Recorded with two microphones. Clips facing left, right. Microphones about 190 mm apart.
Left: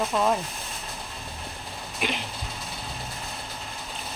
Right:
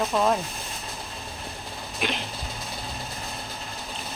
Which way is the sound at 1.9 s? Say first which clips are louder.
Even; 5° left (ahead or behind).